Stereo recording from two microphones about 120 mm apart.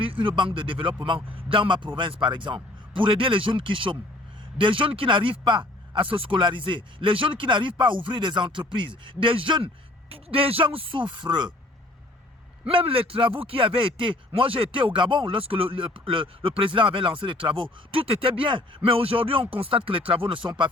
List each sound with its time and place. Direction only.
0.0 s speech: 45° right (ahead or behind)
12.6 s speech: 50° right (ahead or behind)